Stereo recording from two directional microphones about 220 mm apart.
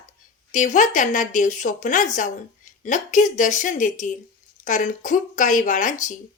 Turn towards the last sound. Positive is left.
turn(degrees=35)  # may be behind; listen again after turning